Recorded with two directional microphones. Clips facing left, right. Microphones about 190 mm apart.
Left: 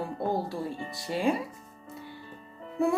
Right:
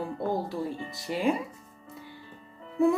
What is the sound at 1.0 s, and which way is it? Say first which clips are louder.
Speech: even; 25° left (ahead or behind).